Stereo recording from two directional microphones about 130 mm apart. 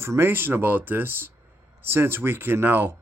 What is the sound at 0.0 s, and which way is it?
Speech, 20° right (ahead or behind).